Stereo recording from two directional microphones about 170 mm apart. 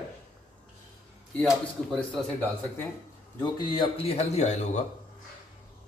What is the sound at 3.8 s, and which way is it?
Speech, 35° left (ahead or behind).